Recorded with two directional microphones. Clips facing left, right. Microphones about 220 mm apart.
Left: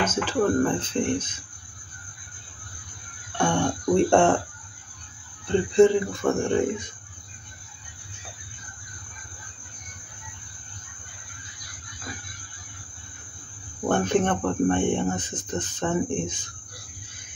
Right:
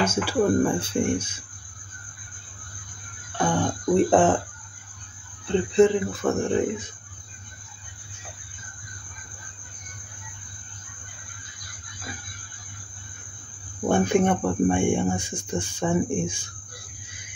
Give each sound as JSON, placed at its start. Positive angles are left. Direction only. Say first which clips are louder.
{"t": 0.0, "sound": "speech", "louder": "right 1 dB", "side_deg": -10}
{"t": 3.3, "sound": "speech", "louder": "left 1 dB", "side_deg": -5}
{"t": 5.5, "sound": "speech", "louder": "left 1 dB", "side_deg": 0}
{"t": 13.8, "sound": "speech", "louder": "right 2 dB", "side_deg": -10}